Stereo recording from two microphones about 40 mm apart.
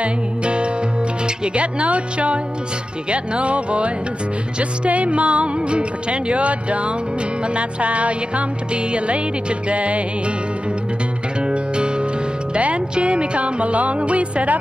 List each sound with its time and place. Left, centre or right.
0.0 s music: right
1.2 s speech: right
11.4 s music: right
12.5 s speech: right